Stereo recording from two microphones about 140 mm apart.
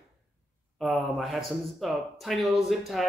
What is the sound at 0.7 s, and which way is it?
Speech, centre (ahead or behind).